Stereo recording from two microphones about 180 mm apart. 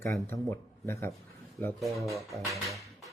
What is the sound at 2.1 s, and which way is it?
Speech, 15° right (ahead or behind).